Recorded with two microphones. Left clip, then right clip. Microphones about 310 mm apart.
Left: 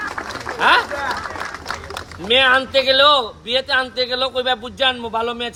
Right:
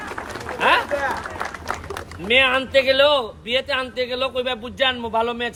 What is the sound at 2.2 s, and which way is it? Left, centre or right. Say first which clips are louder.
A man's voice: left 3 dB; centre.